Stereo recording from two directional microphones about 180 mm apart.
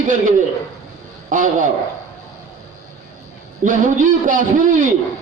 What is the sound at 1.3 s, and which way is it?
Speech, 45° right (ahead or behind).